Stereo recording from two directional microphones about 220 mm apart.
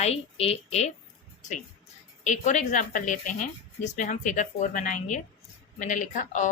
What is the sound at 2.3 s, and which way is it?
Speech, 35° left (ahead or behind).